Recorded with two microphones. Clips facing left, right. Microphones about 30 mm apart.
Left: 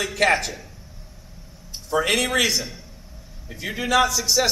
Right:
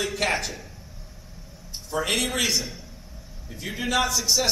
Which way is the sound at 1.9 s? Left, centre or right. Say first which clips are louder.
Left 5 dB; centre.